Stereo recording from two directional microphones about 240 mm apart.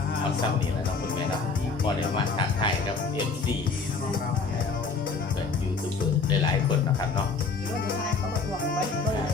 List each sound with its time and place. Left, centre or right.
2.1 s speech: centre